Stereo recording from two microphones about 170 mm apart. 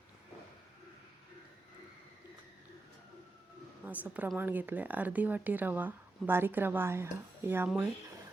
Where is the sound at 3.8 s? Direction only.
10° right (ahead or behind).